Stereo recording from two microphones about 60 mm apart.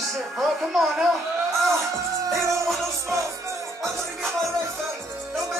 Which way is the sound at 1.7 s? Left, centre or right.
Right.